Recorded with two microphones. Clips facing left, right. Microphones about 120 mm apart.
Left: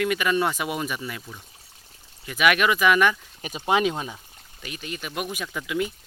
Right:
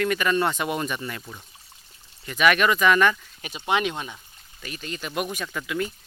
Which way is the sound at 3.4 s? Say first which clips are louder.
Left 2 dB; 35° left (ahead or behind).